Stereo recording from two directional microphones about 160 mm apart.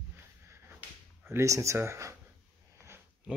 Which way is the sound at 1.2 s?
15° right (ahead or behind).